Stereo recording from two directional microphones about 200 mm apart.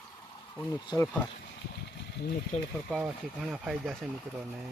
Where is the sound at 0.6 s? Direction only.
15° left (ahead or behind).